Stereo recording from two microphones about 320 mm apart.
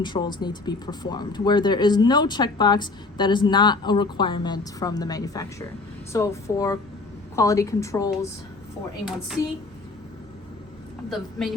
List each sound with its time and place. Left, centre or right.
0.0 s speech: centre
11.1 s a woman's voice: centre